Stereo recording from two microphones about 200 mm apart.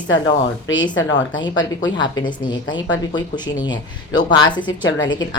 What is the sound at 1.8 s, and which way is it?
Speech, 20° left (ahead or behind).